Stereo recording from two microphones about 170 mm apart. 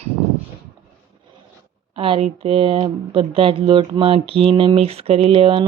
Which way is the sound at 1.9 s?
30° right (ahead or behind).